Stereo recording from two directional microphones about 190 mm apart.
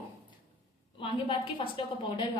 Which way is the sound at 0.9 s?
25° left (ahead or behind).